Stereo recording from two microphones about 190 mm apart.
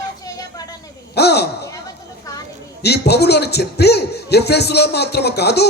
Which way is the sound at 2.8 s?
60° left (ahead or behind).